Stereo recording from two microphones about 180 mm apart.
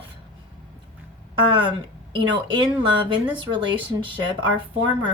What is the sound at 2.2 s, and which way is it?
Speech, 25° right (ahead or behind).